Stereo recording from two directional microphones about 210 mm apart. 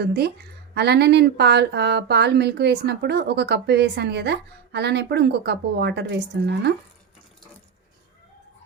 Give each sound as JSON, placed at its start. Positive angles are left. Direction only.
{"t": 0.0, "sound": "speech", "side_deg": -50}